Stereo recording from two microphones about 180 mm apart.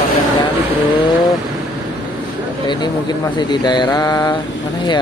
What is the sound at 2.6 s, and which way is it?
Speech, 25° left (ahead or behind).